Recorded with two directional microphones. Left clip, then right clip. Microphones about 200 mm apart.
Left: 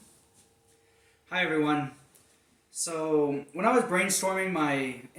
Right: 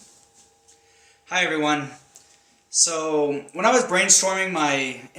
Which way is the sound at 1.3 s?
15° left (ahead or behind).